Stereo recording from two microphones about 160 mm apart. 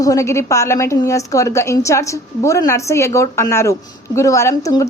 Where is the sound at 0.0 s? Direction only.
20° left (ahead or behind).